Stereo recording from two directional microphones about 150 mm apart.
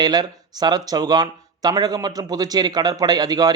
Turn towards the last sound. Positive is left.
turn(degrees=-25)  # may be behind; listen again after turning